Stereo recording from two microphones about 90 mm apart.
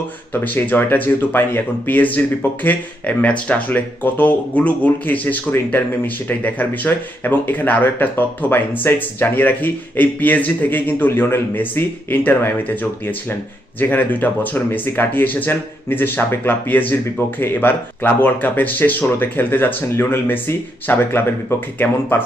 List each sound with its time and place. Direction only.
0.4 s speech: 20° left (ahead or behind)